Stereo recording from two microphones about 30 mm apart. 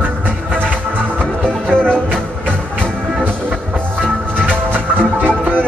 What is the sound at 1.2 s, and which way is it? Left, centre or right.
Music, left.